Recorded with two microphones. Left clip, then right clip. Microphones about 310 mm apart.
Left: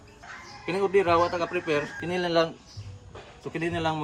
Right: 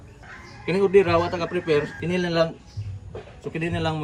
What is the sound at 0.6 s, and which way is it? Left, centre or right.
Speech, centre.